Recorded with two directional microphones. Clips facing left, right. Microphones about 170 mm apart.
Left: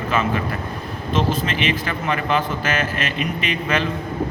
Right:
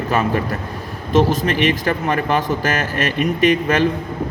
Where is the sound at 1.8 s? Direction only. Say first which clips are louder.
Right 4 dB; 40° right (ahead or behind).